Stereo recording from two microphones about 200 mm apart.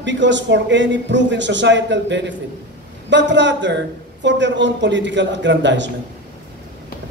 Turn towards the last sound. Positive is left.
turn(degrees=-65)  # may be behind; listen again after turning